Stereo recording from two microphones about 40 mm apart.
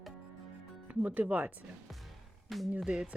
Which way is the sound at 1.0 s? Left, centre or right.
Right.